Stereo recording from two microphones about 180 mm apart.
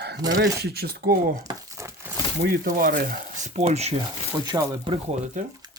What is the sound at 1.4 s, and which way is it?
Crumpling, 20° right (ahead or behind).